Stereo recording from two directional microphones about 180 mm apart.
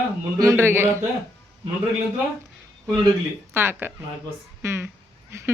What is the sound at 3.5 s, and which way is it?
Speech, 10° right (ahead or behind).